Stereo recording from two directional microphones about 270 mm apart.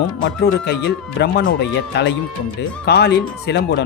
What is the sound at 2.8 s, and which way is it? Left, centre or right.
Speech, left.